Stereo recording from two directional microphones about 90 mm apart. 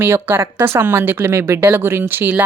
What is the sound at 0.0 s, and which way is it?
A woman's voice, 25° right (ahead or behind).